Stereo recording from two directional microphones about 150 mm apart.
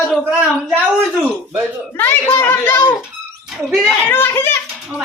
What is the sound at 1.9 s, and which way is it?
A child's voice, 15° left (ahead or behind).